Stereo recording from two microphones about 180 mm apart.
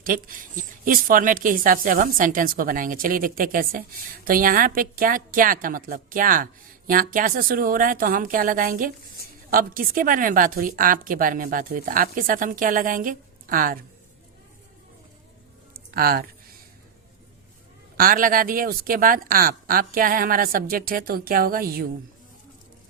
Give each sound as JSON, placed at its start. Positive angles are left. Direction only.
{"t": 0.0, "sound": "a woman's voice", "side_deg": -50}
{"t": 15.7, "sound": "a sound", "side_deg": -55}
{"t": 17.9, "sound": "a woman's voice", "side_deg": -50}